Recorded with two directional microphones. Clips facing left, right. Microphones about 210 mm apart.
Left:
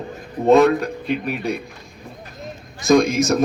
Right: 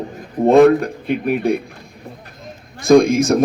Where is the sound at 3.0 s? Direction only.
55° right (ahead or behind).